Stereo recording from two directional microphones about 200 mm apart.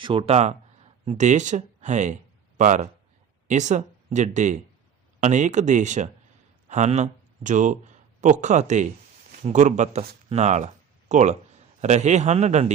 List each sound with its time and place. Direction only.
0.0 s speech: 25° right (ahead or behind)